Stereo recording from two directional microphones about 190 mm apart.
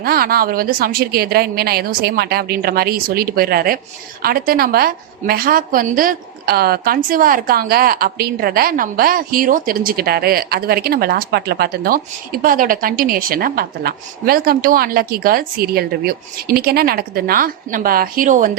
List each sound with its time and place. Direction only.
0.0 s a woman's voice: 50° right (ahead or behind)